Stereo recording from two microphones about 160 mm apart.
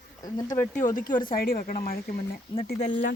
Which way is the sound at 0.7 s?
55° left (ahead or behind).